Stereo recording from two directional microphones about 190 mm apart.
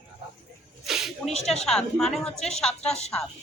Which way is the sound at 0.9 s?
Centre (ahead or behind).